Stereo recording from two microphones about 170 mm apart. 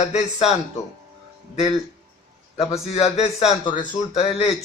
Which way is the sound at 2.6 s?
35° left (ahead or behind).